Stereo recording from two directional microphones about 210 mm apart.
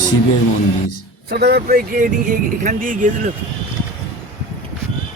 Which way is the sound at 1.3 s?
50° right (ahead or behind).